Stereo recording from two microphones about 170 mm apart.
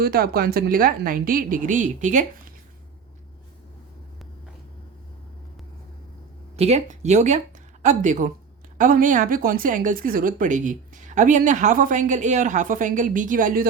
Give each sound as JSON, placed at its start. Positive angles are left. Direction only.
{"t": 0.0, "sound": "a woman's voice", "side_deg": -60}
{"t": 6.6, "sound": "a woman's voice", "side_deg": -40}